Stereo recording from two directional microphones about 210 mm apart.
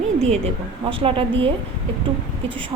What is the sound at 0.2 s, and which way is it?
A woman's voice, 30° right (ahead or behind).